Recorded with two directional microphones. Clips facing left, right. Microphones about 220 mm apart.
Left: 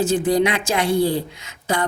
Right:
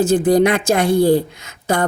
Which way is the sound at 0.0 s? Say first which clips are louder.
Right 5 dB; 50° right (ahead or behind).